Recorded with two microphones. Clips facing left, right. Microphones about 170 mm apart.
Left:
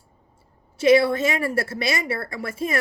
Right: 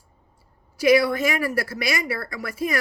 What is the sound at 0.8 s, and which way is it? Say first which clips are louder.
A woman's voice: left 1 dB; 25° left (ahead or behind).